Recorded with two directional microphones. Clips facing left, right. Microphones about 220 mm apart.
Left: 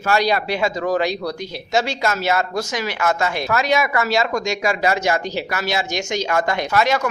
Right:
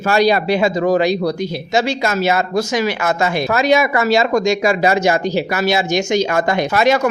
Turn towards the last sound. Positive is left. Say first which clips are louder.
# right 3 dB
turn(degrees=-25)  # may be behind; listen again after turning